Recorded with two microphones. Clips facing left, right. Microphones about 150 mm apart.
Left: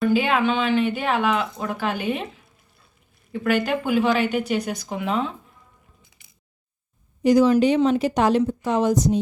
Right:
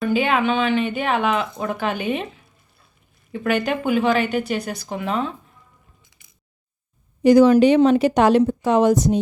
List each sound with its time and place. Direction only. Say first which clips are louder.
0.0 s speech: even; centre (ahead or behind)
3.4 s speech: right 1 dB; centre (ahead or behind)
7.2 s speech: right 4 dB; 70° right (ahead or behind)